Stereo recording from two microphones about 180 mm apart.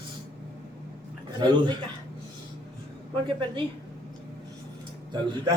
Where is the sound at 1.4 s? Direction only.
25° right (ahead or behind).